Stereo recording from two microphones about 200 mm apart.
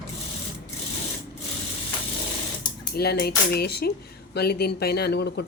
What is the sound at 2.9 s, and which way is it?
A woman's voice, 50° left (ahead or behind).